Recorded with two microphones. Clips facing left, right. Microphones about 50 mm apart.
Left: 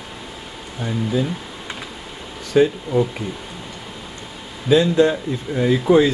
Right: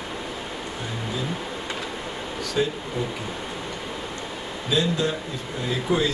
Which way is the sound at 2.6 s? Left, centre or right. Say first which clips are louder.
Left 10 dB; left.